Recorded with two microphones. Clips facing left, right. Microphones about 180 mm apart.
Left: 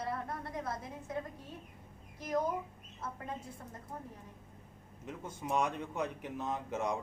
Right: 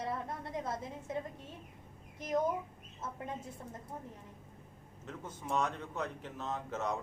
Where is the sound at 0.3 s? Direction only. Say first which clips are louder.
Right 1 dB; 20° right (ahead or behind).